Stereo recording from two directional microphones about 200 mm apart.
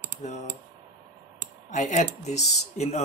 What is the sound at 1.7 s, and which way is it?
Speech, 35° left (ahead or behind).